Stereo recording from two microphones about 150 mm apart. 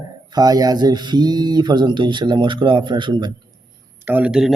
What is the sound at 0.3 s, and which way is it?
Speech, 25° right (ahead or behind).